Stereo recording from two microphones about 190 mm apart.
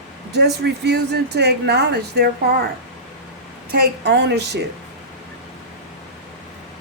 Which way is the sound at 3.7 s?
60° right (ahead or behind).